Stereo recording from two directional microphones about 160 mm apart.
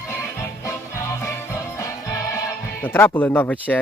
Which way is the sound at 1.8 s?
15° left (ahead or behind).